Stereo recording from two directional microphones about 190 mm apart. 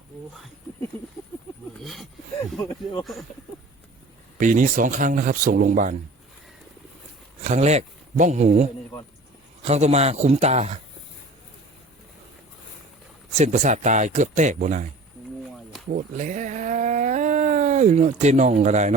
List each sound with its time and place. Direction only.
1.8 s speech: centre (ahead or behind)
2.6 s speech: 20° left (ahead or behind)
3.0 s speech: centre (ahead or behind)
4.4 s speech: 40° right (ahead or behind)
7.4 s speech: 35° right (ahead or behind)
9.6 s speech: 35° right (ahead or behind)
13.3 s speech: 40° right (ahead or behind)
15.9 s speech: 45° right (ahead or behind)